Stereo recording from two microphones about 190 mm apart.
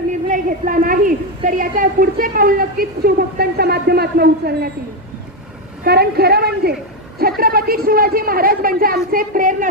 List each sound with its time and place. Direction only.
0.3 s a woman's voice: 45° right (ahead or behind)
5.8 s a woman's voice: 55° right (ahead or behind)